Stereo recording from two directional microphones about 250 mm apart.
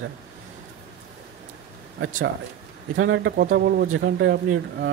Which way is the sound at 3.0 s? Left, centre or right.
Right.